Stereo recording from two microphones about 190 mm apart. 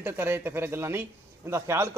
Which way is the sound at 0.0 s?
10° right (ahead or behind).